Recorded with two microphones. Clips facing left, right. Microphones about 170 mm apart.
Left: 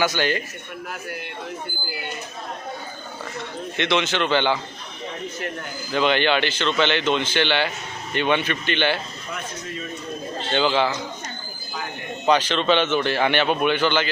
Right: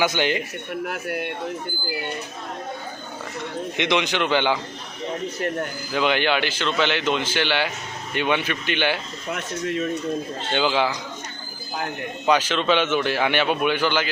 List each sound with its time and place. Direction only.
0.0 s a man's voice: 15° right (ahead or behind)
0.7 s speech: 60° right (ahead or behind)
3.8 s a man's voice: 15° right (ahead or behind)
5.9 s a man's voice: 5° right (ahead or behind)
9.3 s speech: 65° right (ahead or behind)
10.5 s a man's voice: 10° right (ahead or behind)
12.2 s a man's voice: 10° right (ahead or behind)